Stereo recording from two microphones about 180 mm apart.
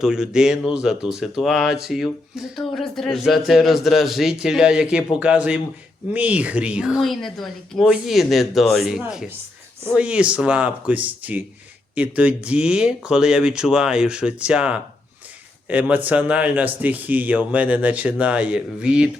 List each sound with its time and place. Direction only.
0.0 s speech: 5° right (ahead or behind)